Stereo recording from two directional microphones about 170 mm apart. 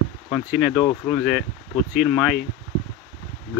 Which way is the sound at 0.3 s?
5° right (ahead or behind).